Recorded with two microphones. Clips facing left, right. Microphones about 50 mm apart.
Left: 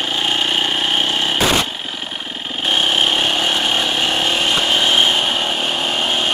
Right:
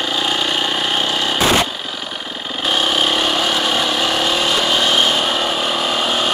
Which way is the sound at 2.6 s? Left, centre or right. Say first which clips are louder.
Even; left.